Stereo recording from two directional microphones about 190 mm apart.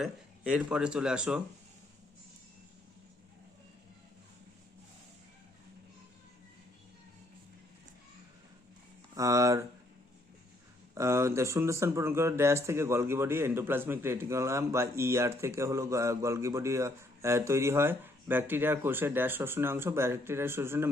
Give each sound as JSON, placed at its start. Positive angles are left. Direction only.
{"t": 0.0, "sound": "speech", "side_deg": -5}
{"t": 9.1, "sound": "speech", "side_deg": -15}
{"t": 10.9, "sound": "speech", "side_deg": -15}